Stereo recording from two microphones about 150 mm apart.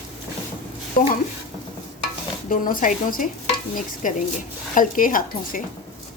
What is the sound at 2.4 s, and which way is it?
A woman's voice, 65° left (ahead or behind).